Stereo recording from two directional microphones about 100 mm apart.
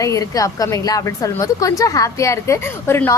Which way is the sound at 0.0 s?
35° left (ahead or behind).